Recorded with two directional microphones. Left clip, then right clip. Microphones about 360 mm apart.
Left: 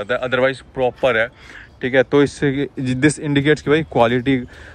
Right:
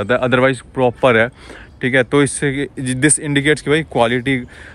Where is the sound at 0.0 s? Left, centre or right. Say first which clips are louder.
Right 4 dB; centre.